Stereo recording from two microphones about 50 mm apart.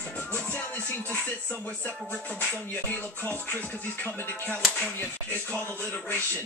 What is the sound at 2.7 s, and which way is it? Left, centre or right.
Music, left.